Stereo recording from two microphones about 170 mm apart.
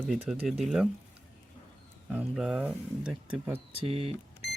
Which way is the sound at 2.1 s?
5° right (ahead or behind).